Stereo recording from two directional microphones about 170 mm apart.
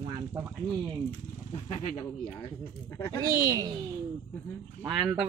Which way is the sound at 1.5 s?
35° left (ahead or behind).